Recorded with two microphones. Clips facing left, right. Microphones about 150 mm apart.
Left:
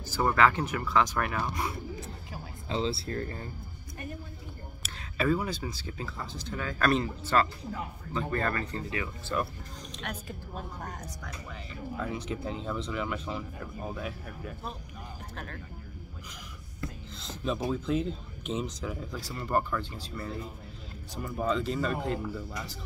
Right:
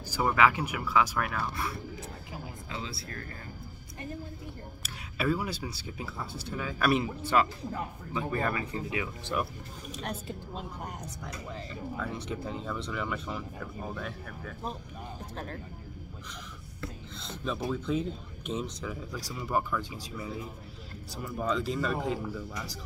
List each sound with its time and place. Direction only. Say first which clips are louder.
0.1 s speech: left 1 dB; 10° right (ahead or behind)
1.4 s speech: left 2 dB; 20° left (ahead or behind)
2.7 s speech: left 10 dB; 30° left (ahead or behind)
4.8 s speech: left 2 dB; 5° right (ahead or behind)
10.0 s a woman's voice: right 2 dB; 25° right (ahead or behind)
12.0 s speech: left 3 dB; centre (ahead or behind)
15.3 s speech: right 3 dB; 35° right (ahead or behind)
17.5 s speech: left 2 dB; centre (ahead or behind)